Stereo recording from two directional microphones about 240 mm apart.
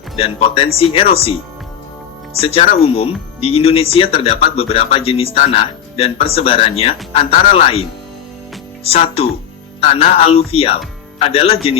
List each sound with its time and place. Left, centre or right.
0.2 s speech: left
2.4 s speech: left